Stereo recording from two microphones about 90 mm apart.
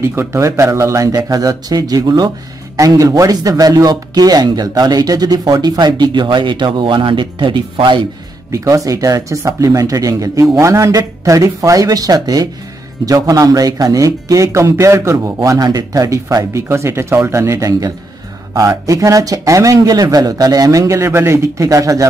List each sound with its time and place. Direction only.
0.0 s speech: 30° right (ahead or behind); by 8.1 s 65° right (ahead or behind)
8.5 s speech: 40° right (ahead or behind)
21.6 s speech: 40° right (ahead or behind)